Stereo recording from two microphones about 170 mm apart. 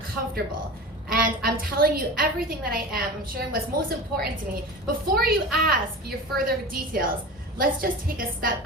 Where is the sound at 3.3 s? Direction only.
60° right (ahead or behind).